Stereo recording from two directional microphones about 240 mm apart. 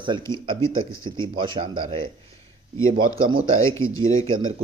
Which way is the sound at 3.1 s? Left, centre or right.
Right.